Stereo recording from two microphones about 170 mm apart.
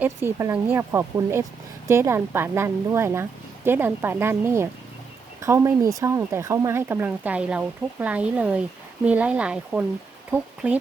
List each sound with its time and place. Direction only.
0.0 s speech: 15° right (ahead or behind)